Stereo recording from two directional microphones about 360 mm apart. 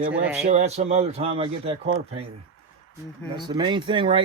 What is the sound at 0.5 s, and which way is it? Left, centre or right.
Speech, centre.